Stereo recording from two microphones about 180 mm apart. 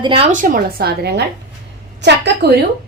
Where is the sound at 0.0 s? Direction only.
30° right (ahead or behind).